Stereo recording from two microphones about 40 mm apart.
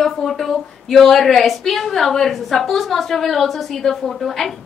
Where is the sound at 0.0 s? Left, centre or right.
Centre.